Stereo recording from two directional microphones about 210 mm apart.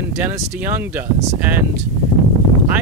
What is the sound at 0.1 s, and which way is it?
Speech, 10° right (ahead or behind).